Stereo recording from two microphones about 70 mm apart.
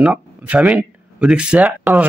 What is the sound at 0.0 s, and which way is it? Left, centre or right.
Speech, centre.